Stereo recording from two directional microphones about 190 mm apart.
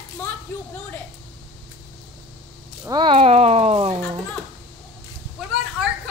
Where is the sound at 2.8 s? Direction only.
25° right (ahead or behind).